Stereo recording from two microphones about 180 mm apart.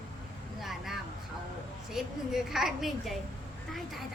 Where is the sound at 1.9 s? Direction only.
Centre (ahead or behind).